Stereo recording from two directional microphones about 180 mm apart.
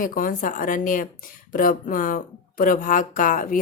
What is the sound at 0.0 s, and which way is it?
A woman's voice, 50° left (ahead or behind).